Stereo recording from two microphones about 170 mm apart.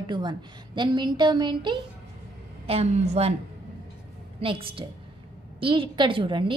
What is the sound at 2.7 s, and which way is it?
Speech, 40° right (ahead or behind).